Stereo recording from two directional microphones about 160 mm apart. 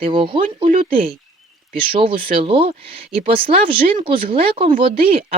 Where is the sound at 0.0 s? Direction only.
35° right (ahead or behind).